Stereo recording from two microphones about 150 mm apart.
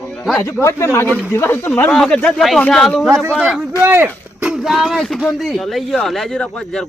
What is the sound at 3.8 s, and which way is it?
Speech, 15° right (ahead or behind).